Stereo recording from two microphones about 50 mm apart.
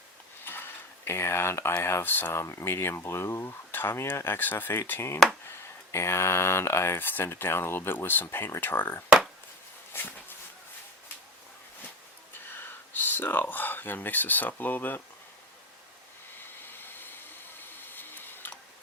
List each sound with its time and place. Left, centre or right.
0.4 s mechanisms: left
1.8 s speech: left
2.0 s speech: left
2.3 s speech: left
4.9 s speech: left
9.9 s a sound: left
12.5 s speech: left
16.4 s a sound: left